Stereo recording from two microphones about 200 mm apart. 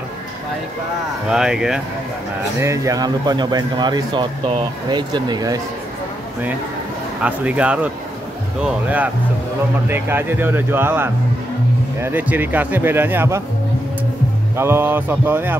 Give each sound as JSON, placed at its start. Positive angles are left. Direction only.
{"t": 1.3, "sound": "speech", "side_deg": -5}
{"t": 2.6, "sound": "speech", "side_deg": -15}
{"t": 7.2, "sound": "speech", "side_deg": -5}
{"t": 14.6, "sound": "speech", "side_deg": -10}